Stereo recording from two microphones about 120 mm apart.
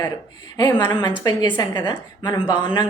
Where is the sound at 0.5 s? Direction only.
35° left (ahead or behind).